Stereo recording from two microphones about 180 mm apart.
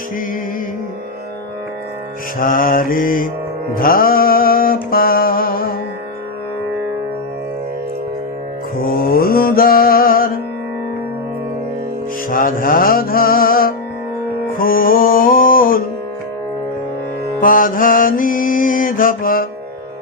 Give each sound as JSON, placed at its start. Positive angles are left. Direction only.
{"t": 2.4, "sound": "mantra", "side_deg": 50}
{"t": 3.8, "sound": "music", "side_deg": 55}
{"t": 8.9, "sound": "music", "side_deg": 55}
{"t": 12.3, "sound": "music", "side_deg": 50}
{"t": 17.4, "sound": "mantra", "side_deg": 50}